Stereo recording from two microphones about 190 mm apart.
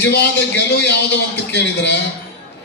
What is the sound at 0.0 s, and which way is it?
A man's voice, 60° left (ahead or behind).